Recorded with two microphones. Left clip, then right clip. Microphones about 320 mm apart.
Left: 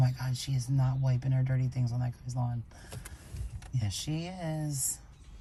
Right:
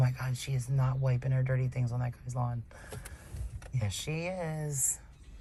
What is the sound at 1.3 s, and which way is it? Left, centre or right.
Speech, right.